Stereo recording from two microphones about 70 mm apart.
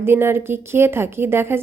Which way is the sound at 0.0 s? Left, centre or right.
Right.